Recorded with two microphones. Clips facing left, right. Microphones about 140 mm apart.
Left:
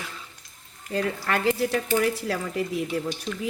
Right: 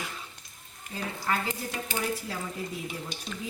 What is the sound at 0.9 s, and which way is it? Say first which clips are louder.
Speech: left 6 dB; 85° left.